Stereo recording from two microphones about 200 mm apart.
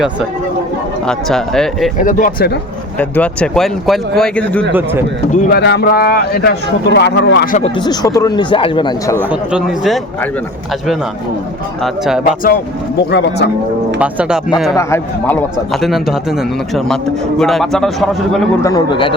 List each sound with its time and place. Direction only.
1.0 s a man's voice: centre (ahead or behind)
2.0 s speech: 40° left (ahead or behind)
3.0 s a man's voice: 5° left (ahead or behind)
4.7 s a man's voice: 10° right (ahead or behind)
5.3 s speech: 40° left (ahead or behind)
5.5 s speech: 55° left (ahead or behind); by 7.7 s 40° left (ahead or behind)
7.8 s speech: 20° left (ahead or behind)
9.1 s a man's voice: 10° right (ahead or behind)
11.8 s a man's voice: centre (ahead or behind)
13.1 s speech: 60° left (ahead or behind)
14.0 s a man's voice: 5° right (ahead or behind)
14.8 s a man's voice: 15° left (ahead or behind)
15.7 s a man's voice: centre (ahead or behind)
18.6 s speech: 20° left (ahead or behind)